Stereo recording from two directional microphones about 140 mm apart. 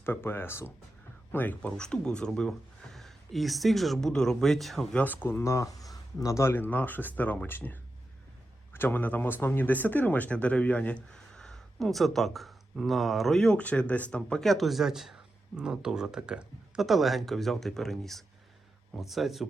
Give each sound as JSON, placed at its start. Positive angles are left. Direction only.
{"t": 0.0, "sound": "speech", "side_deg": 15}